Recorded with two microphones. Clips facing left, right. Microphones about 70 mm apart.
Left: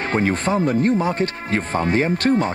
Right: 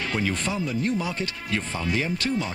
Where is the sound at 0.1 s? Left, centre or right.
Left.